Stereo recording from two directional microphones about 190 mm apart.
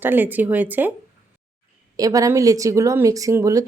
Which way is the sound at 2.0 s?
20° right (ahead or behind).